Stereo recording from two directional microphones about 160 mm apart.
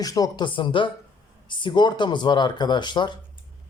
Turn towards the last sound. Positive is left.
turn(degrees=30)  # may be behind; listen again after turning